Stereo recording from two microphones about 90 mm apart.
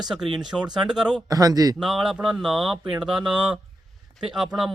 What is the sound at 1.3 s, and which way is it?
Speech, 45° right (ahead or behind).